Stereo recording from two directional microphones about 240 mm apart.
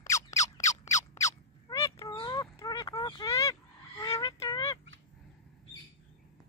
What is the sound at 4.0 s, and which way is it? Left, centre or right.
Fowl, centre.